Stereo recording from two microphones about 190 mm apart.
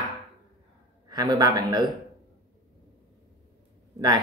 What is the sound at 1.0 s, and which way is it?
Speech, 20° right (ahead or behind).